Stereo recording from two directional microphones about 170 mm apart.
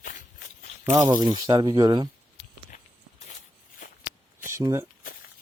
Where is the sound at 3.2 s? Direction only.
45° left (ahead or behind).